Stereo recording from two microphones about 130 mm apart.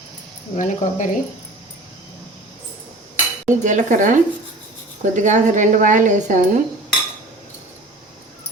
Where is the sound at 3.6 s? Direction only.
70° right (ahead or behind).